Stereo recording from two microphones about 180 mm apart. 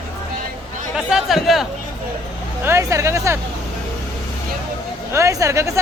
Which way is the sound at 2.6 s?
15° right (ahead or behind).